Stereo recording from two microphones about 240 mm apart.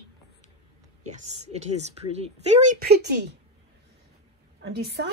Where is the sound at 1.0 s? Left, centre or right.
Right.